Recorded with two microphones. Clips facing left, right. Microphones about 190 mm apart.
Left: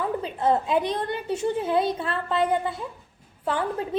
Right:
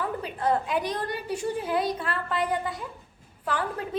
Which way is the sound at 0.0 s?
25° left (ahead or behind).